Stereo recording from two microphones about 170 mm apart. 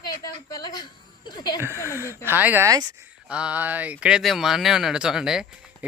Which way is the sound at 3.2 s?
5° right (ahead or behind).